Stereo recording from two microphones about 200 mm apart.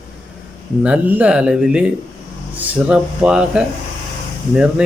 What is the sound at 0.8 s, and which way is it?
Speech, 5° right (ahead or behind).